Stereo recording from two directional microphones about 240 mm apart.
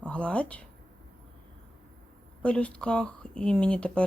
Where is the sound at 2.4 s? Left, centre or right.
Centre.